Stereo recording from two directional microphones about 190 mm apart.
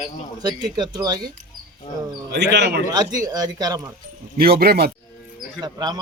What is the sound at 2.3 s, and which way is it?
Speech, 65° right (ahead or behind).